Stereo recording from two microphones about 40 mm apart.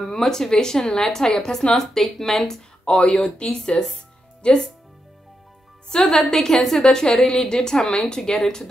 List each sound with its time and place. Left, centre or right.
0.0 s a woman's voice: centre
1.8 s a woman's voice: centre
3.0 s speech: left
5.9 s a woman's voice: centre